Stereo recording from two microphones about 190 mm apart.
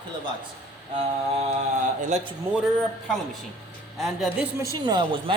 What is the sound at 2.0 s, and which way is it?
Speech, 35° right (ahead or behind).